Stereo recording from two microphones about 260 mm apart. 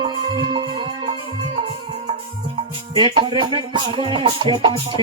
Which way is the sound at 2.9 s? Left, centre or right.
Centre.